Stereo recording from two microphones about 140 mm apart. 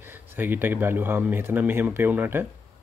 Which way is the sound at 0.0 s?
15° right (ahead or behind).